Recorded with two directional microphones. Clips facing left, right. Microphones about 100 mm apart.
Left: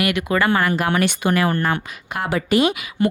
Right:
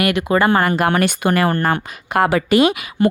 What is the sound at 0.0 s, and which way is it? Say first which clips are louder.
Speech: right 3 dB; 35° right (ahead or behind).